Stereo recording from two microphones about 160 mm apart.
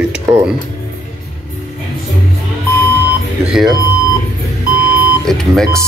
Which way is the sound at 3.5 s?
Centre (ahead or behind).